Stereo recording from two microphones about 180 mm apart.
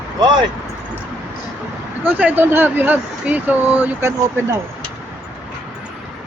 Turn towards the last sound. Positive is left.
turn(degrees=-15)  # may be behind; listen again after turning